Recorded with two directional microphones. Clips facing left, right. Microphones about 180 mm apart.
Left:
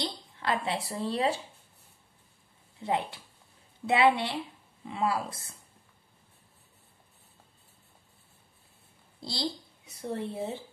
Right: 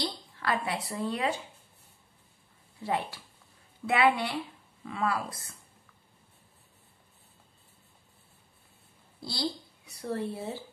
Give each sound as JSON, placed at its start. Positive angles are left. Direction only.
{"t": 0.0, "sound": "speech", "side_deg": 25}
{"t": 2.8, "sound": "a woman's voice", "side_deg": 20}
{"t": 9.2, "sound": "speech", "side_deg": 25}